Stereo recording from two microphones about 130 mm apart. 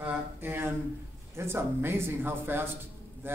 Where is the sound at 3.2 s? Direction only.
15° right (ahead or behind).